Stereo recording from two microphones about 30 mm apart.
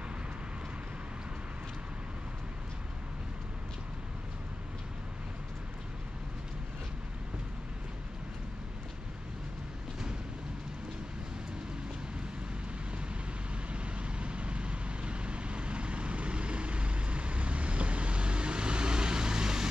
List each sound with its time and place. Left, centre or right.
13.7 s vehicle: right